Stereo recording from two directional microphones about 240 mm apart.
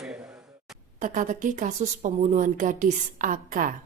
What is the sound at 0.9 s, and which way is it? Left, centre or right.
Speech, right.